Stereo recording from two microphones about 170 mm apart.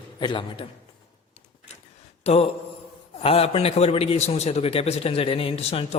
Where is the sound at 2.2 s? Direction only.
35° left (ahead or behind).